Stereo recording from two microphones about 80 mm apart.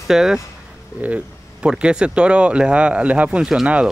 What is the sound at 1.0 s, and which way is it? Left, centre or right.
Speech, centre.